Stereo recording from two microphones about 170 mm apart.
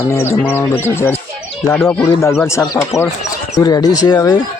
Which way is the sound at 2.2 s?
15° left (ahead or behind).